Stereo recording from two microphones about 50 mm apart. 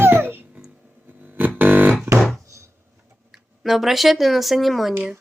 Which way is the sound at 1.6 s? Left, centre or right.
Right.